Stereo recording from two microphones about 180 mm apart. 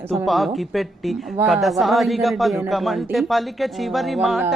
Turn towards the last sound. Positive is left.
turn(degrees=0)  # may be behind; listen again after turning